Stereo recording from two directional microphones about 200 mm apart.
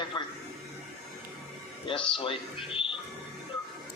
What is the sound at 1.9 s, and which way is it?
Speech, 25° left (ahead or behind).